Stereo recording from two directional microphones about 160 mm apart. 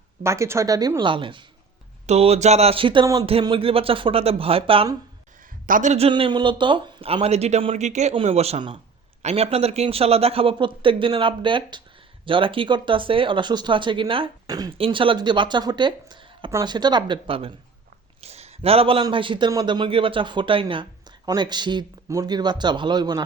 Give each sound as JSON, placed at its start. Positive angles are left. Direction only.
{"t": 0.2, "sound": "a man's voice", "side_deg": -15}
{"t": 5.6, "sound": "a man's voice", "side_deg": -55}
{"t": 6.1, "sound": "a man's voice", "side_deg": -30}